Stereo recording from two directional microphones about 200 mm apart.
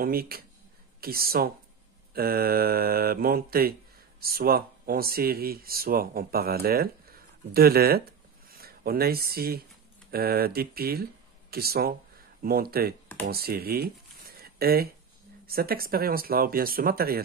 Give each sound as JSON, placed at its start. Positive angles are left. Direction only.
{"t": 0.0, "sound": "speech", "side_deg": -50}